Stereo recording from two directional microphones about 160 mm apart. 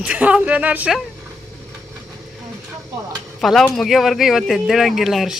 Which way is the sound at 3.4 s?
Centre (ahead or behind).